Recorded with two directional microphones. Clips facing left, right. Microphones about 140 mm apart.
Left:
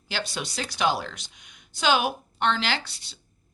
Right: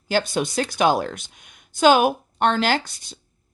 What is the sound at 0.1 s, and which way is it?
A woman's voice, 50° right (ahead or behind).